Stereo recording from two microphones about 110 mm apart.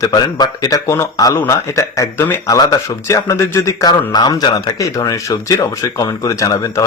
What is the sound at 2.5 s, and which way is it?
Speech, 30° left (ahead or behind).